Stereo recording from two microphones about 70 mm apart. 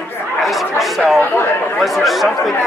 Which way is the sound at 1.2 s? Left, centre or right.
Left.